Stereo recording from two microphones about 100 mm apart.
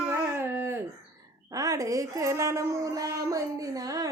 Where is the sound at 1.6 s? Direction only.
35° right (ahead or behind).